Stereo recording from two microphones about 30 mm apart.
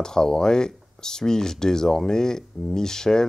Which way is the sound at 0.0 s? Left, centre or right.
Left.